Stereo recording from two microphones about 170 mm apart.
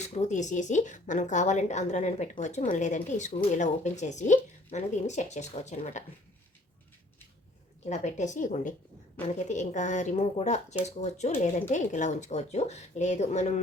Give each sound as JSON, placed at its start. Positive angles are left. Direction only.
{"t": 0.0, "sound": "speech", "side_deg": 40}
{"t": 7.9, "sound": "speech", "side_deg": 45}